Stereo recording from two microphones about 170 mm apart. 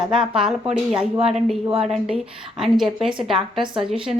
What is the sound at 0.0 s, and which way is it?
Speech, 5° right (ahead or behind).